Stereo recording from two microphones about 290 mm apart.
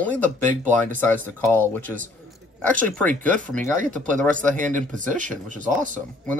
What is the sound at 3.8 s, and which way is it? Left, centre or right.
Speech, right.